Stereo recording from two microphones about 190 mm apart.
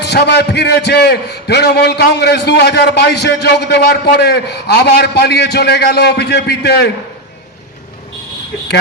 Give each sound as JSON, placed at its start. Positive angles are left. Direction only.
{"t": 0.0, "sound": "a man's voice", "side_deg": 60}